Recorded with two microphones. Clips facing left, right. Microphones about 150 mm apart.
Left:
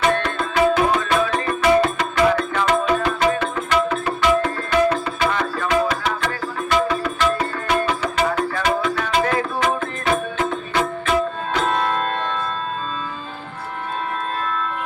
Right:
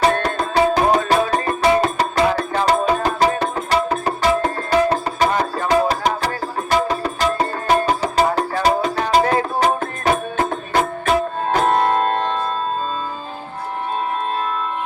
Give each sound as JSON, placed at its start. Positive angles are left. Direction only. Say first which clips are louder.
{"t": 0.0, "sound": "music", "louder": "right 2 dB", "side_deg": -40}